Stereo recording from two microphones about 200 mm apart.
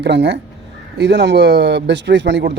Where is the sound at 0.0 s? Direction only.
60° right (ahead or behind).